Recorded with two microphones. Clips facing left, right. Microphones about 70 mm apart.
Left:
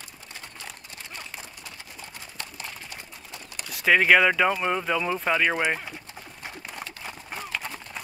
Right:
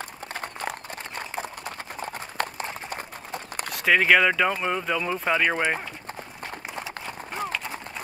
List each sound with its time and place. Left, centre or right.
0.3 s a sound: right
2.0 s clip-clop: right
3.7 s speech: centre